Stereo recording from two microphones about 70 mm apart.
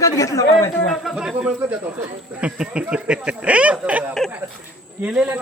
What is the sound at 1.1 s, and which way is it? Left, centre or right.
Speech, centre.